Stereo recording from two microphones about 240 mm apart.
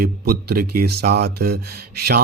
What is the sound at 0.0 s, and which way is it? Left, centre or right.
Mantra, right.